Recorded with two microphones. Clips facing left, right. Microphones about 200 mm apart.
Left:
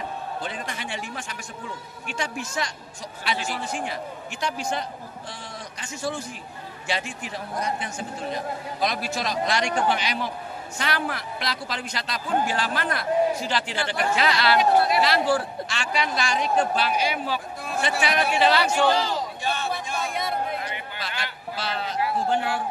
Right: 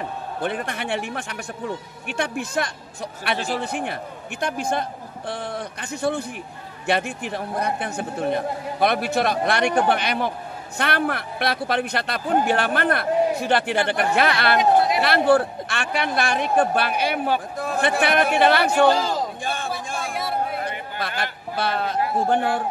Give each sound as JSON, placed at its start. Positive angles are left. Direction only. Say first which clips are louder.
{"t": 0.4, "sound": "a man's voice", "louder": "right 6 dB", "side_deg": -60}
{"t": 3.3, "sound": "a man's voice", "louder": "right 5 dB", "side_deg": -35}
{"t": 3.6, "sound": "a man's voice", "louder": "right 3 dB", "side_deg": -60}
{"t": 20.6, "sound": "a sound", "louder": "right 5 dB", "side_deg": -50}